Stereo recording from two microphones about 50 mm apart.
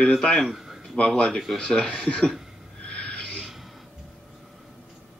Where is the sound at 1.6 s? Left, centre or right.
Centre.